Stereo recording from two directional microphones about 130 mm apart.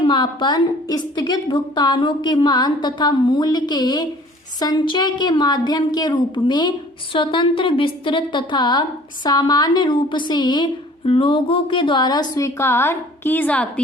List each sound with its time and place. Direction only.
0.0 s a woman's voice: 35° left (ahead or behind); by 13.8 s 10° left (ahead or behind)